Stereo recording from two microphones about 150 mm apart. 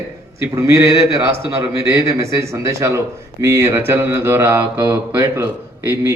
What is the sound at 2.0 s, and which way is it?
A man's voice, 20° right (ahead or behind).